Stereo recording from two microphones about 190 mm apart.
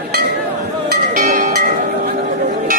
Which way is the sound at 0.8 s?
45° right (ahead or behind).